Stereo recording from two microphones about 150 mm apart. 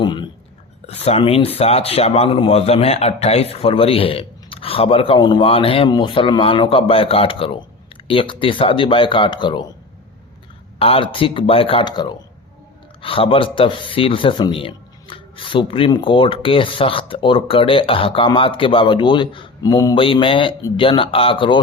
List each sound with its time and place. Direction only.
0.0 s whispering: 30° left (ahead or behind)
0.9 s speech: 45° left (ahead or behind)
10.8 s speech: 40° left (ahead or behind)